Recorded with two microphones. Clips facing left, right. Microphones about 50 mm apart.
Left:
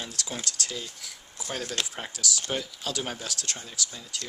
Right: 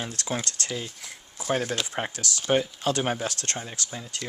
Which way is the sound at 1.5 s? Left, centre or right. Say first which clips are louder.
Right 6 dB; right.